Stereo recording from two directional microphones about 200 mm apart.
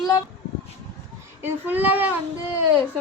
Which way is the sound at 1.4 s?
10° right (ahead or behind).